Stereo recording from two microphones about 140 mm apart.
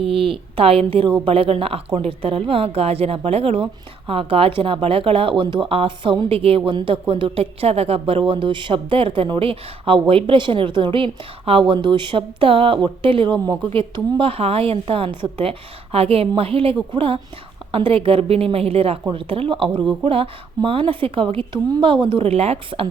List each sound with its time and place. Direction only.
0.0 s a woman's voice: 40° right (ahead or behind)